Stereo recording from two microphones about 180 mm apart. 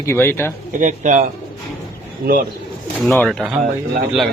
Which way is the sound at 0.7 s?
45° right (ahead or behind).